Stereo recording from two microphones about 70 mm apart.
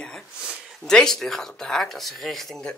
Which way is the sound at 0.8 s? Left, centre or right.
Centre.